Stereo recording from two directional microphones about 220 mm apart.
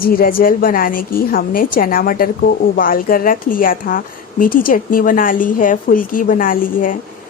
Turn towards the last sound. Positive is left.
turn(degrees=40)  # may be behind; listen again after turning